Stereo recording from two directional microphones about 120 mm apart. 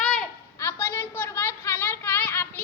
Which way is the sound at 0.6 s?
20° left (ahead or behind).